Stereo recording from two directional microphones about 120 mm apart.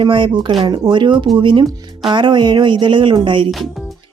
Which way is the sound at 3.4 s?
Centre (ahead or behind).